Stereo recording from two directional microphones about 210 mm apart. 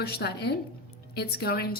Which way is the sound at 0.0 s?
50° left (ahead or behind).